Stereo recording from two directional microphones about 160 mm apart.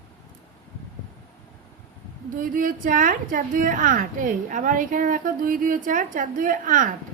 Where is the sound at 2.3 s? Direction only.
60° right (ahead or behind).